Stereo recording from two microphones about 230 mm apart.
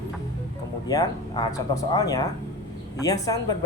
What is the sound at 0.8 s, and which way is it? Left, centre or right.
Speech, centre.